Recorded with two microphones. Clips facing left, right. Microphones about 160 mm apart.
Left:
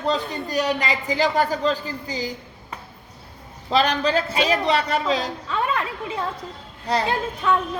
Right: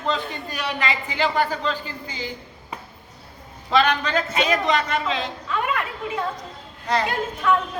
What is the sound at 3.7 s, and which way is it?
A woman's voice, 35° left (ahead or behind).